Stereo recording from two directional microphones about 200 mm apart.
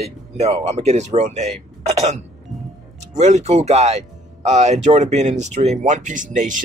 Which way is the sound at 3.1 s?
35° right (ahead or behind).